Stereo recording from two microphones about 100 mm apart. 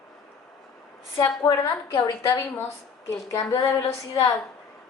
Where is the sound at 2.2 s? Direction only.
25° left (ahead or behind).